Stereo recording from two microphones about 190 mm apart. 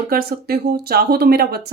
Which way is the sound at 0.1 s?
55° right (ahead or behind).